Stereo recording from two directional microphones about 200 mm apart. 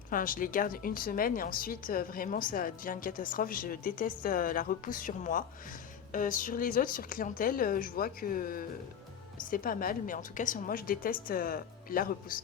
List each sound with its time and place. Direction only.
0.1 s a woman's voice: 45° left (ahead or behind)